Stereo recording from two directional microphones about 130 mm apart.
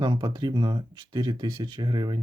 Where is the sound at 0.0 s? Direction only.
35° right (ahead or behind).